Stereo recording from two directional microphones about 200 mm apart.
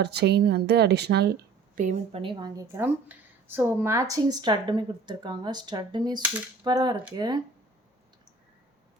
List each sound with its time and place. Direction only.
0.0 s speech: 55° right (ahead or behind)
1.7 s speech: 40° right (ahead or behind)
2.2 s a woman's voice: 20° right (ahead or behind)